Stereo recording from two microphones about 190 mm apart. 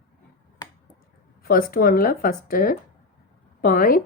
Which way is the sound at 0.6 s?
20° left (ahead or behind).